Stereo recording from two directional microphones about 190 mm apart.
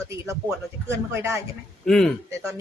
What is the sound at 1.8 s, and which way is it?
Speech, centre (ahead or behind).